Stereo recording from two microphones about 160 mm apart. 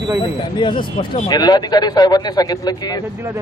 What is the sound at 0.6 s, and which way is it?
Speech, 30° left (ahead or behind).